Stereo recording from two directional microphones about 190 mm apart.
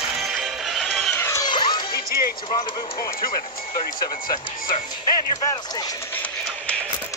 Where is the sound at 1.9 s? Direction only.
50° left (ahead or behind).